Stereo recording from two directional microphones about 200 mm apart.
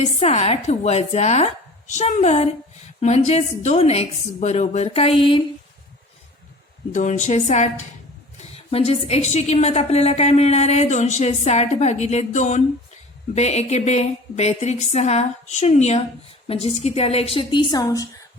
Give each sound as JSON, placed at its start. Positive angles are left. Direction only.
{"t": 0.0, "sound": "a woman's voice", "side_deg": 30}
{"t": 6.9, "sound": "a woman's voice", "side_deg": 35}